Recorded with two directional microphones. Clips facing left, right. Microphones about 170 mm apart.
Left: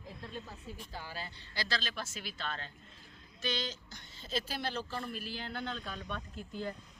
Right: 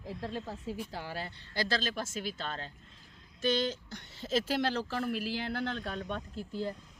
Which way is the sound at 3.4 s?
50° right (ahead or behind).